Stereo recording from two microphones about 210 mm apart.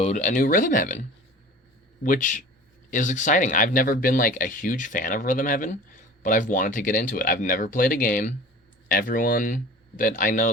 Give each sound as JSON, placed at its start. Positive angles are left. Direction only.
{"t": 0.0, "sound": "speech", "side_deg": 35}
{"t": 2.0, "sound": "speech", "side_deg": 40}